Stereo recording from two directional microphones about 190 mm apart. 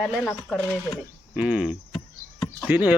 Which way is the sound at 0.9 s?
5° right (ahead or behind).